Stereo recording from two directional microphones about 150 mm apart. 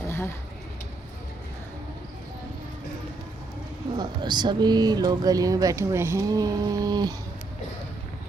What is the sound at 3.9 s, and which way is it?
Speech, 30° right (ahead or behind).